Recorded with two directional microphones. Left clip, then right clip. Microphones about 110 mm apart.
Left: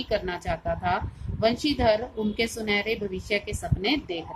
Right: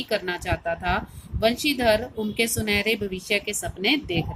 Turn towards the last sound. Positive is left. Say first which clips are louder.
# right 3 dB
turn(degrees=-40)  # may be behind; listen again after turning